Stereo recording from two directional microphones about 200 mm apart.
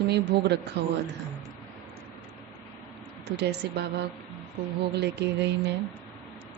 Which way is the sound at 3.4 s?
55° right (ahead or behind).